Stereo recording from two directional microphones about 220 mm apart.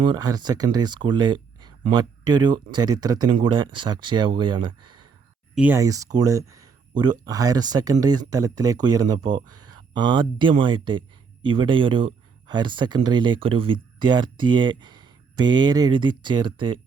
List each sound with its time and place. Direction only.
0.0 s speech: 20° right (ahead or behind)
5.5 s speech: 10° right (ahead or behind)